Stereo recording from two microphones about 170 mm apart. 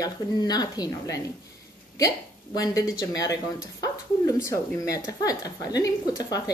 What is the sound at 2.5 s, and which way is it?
A woman's voice, 20° left (ahead or behind).